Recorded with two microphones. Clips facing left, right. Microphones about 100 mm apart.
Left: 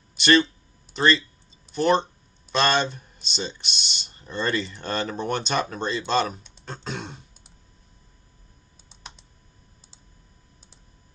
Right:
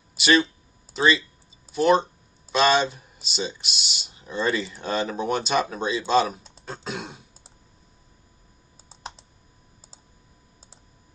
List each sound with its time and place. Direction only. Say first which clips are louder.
0.1 s speech: left 1 dB; 5° right (ahead or behind)
8.8 s computer keyboard: right 7 dB; 35° right (ahead or behind)